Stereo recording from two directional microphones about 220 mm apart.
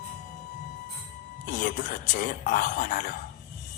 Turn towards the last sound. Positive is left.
turn(degrees=40)  # may be behind; listen again after turning